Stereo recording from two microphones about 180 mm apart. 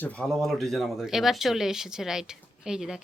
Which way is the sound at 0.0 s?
5° left (ahead or behind).